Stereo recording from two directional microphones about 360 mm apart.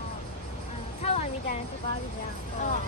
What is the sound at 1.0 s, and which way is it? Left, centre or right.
Music, centre.